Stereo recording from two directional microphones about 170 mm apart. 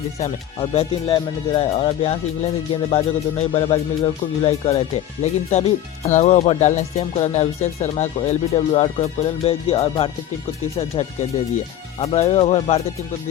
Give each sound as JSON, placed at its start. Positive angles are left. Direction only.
{"t": 0.2, "sound": "speech", "side_deg": 35}